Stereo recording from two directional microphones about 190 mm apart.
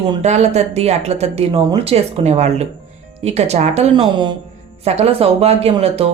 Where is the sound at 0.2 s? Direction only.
35° right (ahead or behind).